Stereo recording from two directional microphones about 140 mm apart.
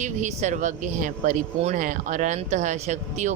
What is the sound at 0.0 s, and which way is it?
Speech, 55° right (ahead or behind).